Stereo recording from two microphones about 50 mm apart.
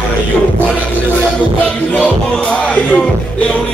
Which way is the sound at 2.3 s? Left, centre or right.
Centre.